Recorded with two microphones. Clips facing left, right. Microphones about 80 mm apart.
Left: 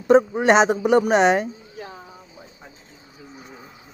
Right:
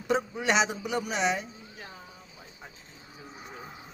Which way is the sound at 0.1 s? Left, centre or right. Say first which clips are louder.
Left 12 dB; left.